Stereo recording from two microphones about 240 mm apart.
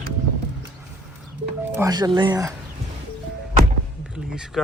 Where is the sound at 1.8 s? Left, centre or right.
Centre.